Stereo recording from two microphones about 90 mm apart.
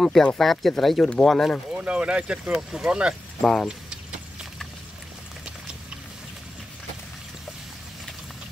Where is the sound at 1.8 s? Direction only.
10° right (ahead or behind).